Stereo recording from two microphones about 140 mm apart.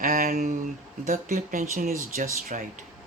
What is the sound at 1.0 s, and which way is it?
Speech, 65° right (ahead or behind).